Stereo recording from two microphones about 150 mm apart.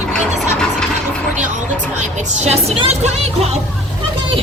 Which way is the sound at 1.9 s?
50° right (ahead or behind).